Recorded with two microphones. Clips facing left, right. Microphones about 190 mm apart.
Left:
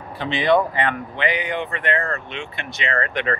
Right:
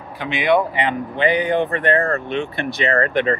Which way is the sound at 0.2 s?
10° right (ahead or behind).